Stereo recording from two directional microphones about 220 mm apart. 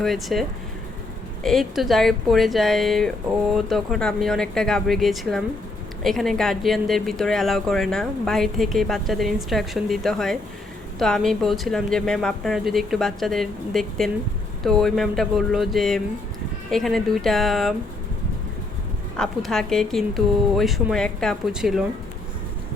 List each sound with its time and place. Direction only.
0.0 s speech: centre (ahead or behind)
1.5 s speech: centre (ahead or behind)
19.1 s speech: 5° left (ahead or behind)